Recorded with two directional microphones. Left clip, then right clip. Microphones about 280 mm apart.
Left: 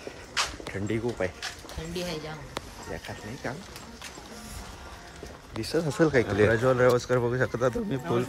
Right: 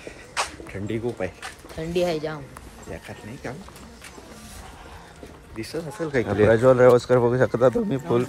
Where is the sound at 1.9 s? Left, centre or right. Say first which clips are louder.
Right 11 dB; centre.